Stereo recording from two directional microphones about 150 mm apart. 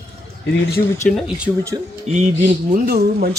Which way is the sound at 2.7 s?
90° right.